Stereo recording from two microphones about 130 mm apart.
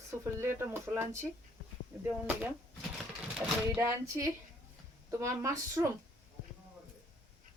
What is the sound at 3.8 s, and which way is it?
Speech, 20° right (ahead or behind).